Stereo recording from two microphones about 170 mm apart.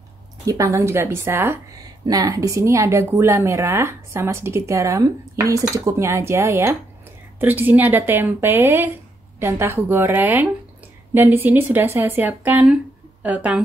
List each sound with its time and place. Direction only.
0.5 s a woman's voice: 20° right (ahead or behind)